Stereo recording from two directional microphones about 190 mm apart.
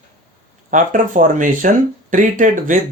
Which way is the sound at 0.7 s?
45° right (ahead or behind).